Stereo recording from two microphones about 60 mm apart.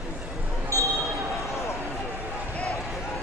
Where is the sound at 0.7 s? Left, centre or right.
Left.